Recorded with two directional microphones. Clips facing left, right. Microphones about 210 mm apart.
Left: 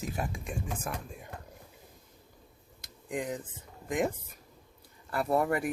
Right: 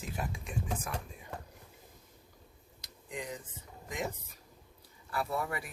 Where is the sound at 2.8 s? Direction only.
50° left (ahead or behind).